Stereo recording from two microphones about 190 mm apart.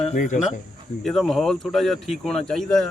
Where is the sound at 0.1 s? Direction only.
40° left (ahead or behind).